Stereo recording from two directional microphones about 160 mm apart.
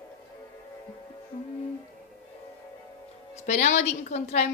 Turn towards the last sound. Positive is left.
turn(degrees=45)  # may be behind; listen again after turning